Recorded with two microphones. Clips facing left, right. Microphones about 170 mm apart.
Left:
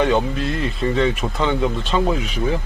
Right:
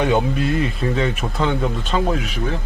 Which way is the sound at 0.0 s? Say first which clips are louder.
Even; 10° right (ahead or behind).